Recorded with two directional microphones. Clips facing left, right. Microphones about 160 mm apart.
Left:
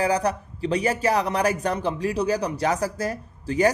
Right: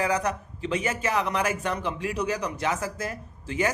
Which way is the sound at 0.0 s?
35° left (ahead or behind).